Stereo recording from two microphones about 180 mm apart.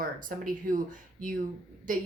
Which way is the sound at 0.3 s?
50° right (ahead or behind).